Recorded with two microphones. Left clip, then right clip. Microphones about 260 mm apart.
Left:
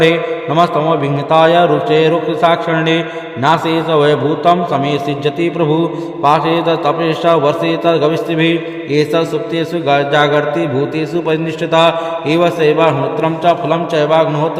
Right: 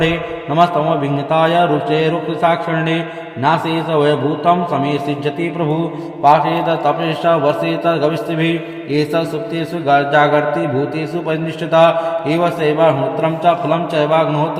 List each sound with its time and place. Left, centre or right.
0.0 s a man's voice: left